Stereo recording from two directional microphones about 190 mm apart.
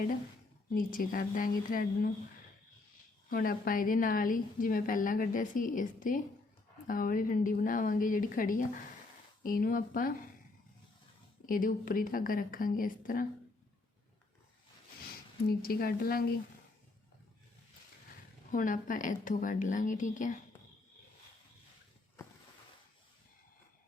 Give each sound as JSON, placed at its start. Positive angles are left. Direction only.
{"t": 0.7, "sound": "a woman's voice", "side_deg": 45}
{"t": 3.2, "sound": "a woman's voice", "side_deg": 50}
{"t": 11.4, "sound": "a woman's voice", "side_deg": 45}
{"t": 15.4, "sound": "a woman's voice", "side_deg": 50}
{"t": 18.5, "sound": "a woman's voice", "side_deg": 45}